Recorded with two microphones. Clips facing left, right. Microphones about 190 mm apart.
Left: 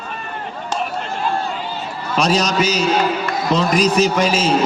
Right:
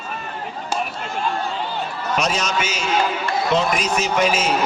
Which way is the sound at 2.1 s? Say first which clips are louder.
Left 6 dB; 35° left (ahead or behind).